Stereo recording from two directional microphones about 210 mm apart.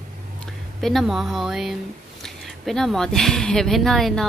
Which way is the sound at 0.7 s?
Centre (ahead or behind).